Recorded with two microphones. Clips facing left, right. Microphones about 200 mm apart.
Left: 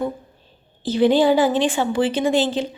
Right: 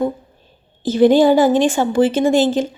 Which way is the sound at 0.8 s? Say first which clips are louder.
Right 5 dB; 45° right (ahead or behind).